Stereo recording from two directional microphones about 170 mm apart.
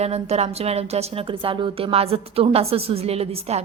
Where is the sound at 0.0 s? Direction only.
40° right (ahead or behind).